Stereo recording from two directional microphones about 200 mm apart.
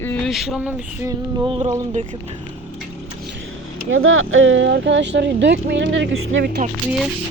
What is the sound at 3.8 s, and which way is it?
Speech, 90° right.